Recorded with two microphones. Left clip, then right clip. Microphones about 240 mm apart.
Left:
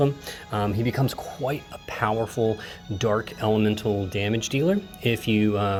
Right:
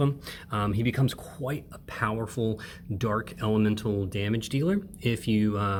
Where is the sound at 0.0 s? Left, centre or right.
Centre.